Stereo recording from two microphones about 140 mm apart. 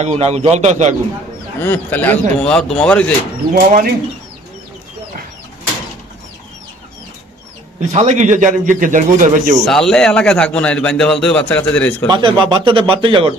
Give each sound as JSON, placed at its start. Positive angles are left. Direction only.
{"t": 0.0, "sound": "a man's voice", "side_deg": -50}
{"t": 1.6, "sound": "a man's voice", "side_deg": 10}
{"t": 3.5, "sound": "speech", "side_deg": -90}
{"t": 7.8, "sound": "speech", "side_deg": -55}
{"t": 9.6, "sound": "a man's voice", "side_deg": 5}
{"t": 12.0, "sound": "speech", "side_deg": -30}